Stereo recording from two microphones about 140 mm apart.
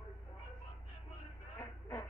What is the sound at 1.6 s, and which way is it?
Vehicle, 15° left (ahead or behind).